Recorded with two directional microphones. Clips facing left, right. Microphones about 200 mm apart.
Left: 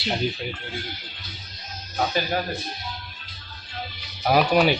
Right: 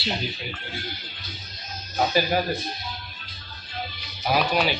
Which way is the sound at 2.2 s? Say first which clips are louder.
Right 5 dB; 10° right (ahead or behind).